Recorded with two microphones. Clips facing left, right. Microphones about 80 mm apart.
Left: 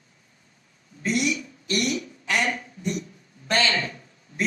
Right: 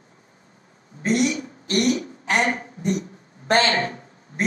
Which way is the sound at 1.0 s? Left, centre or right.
Right.